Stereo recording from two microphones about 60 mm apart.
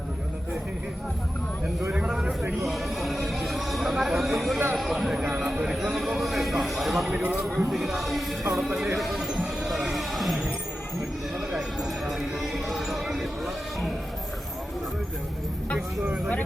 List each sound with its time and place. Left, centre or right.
1.9 s vehicle: centre
2.6 s a sound: centre
4.8 s speech: centre
5.6 s a sound: centre
7.1 s speech: right
7.3 s speech: centre
9.0 s music: centre
11.3 s clip-clop: centre